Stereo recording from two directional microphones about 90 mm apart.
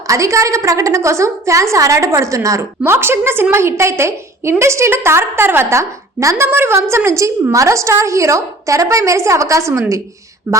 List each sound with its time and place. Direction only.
0.1 s a woman's voice: 35° right (ahead or behind)